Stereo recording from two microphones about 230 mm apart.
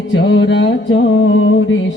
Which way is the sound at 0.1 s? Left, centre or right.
Left.